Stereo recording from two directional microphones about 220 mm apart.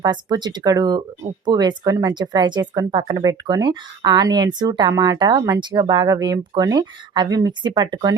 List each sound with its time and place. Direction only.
0.0 s speech: 20° right (ahead or behind)